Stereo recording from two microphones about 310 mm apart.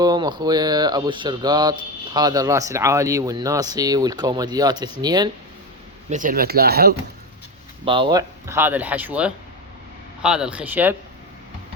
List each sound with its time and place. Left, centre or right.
0.0 s speech: centre
6.1 s speech: right
7.9 s speech: centre